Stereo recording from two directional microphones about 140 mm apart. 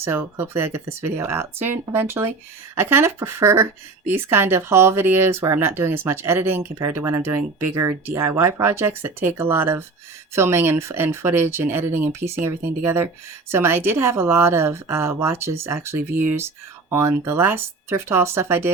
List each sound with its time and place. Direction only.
0.0 s a woman's voice: 15° right (ahead or behind)